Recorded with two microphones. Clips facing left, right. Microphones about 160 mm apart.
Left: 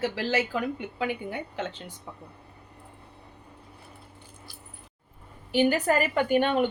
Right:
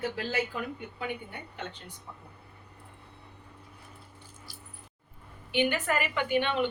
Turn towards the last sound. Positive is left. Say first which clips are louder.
# left 5 dB
turn(degrees=45)  # may be behind; listen again after turning